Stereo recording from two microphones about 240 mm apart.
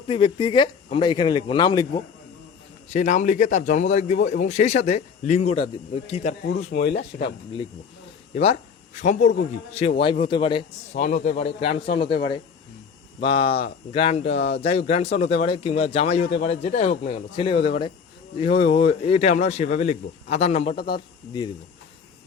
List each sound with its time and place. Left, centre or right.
0.1 s a man's voice: left
2.9 s a man's voice: left
9.0 s a man's voice: left
10.9 s a man's voice: left